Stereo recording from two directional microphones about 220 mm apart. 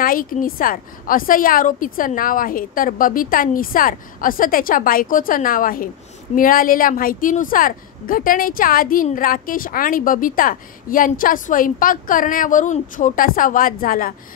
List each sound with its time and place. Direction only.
0.0 s a woman's voice: 40° left (ahead or behind)